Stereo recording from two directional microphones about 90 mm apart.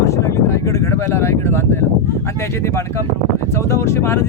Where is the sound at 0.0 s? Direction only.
35° left (ahead or behind).